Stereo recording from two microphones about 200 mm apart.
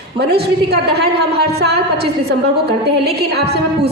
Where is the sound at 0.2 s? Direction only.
55° right (ahead or behind).